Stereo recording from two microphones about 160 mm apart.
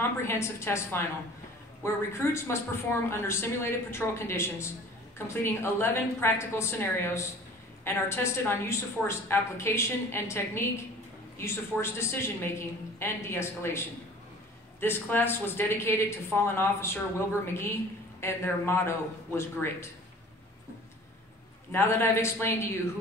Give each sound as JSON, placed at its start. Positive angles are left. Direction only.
{"t": 0.2, "sound": "speech", "side_deg": 15}
{"t": 18.2, "sound": "speech", "side_deg": 15}
{"t": 21.7, "sound": "speech", "side_deg": 15}